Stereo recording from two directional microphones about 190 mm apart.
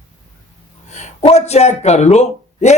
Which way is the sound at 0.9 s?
35° left (ahead or behind).